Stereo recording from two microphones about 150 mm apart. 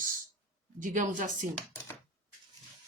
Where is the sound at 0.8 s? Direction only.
60° right (ahead or behind).